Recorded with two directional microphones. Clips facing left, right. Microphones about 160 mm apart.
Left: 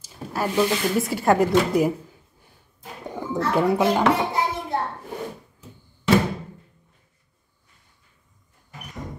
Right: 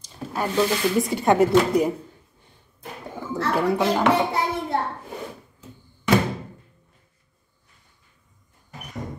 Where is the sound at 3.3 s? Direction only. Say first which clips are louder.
Left 1 dB; 20° left (ahead or behind).